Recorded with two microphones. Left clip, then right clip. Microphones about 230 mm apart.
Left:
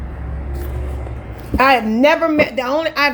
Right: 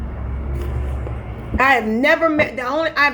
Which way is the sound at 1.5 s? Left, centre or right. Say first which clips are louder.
Left 2 dB; left.